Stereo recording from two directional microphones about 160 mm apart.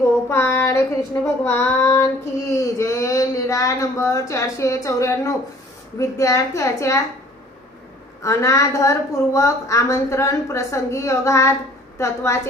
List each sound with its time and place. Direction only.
0.3 s child singing: 15° left (ahead or behind)
2.5 s a woman's voice: 20° left (ahead or behind)
8.2 s a woman's voice: 20° left (ahead or behind)